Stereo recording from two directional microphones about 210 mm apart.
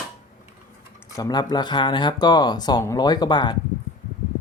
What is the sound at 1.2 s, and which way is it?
Speech, 20° left (ahead or behind).